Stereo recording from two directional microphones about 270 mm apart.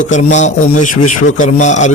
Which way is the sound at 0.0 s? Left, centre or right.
Left.